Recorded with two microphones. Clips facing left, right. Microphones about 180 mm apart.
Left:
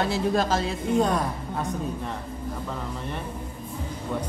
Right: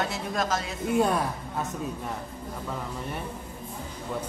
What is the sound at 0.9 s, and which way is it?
Speech, 5° right (ahead or behind).